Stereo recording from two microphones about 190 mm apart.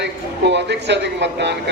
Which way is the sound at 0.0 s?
65° right (ahead or behind).